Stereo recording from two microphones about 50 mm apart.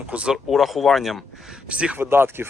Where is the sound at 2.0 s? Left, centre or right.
Right.